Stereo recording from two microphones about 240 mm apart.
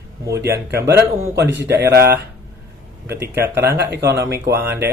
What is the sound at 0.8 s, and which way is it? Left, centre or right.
Speech, centre.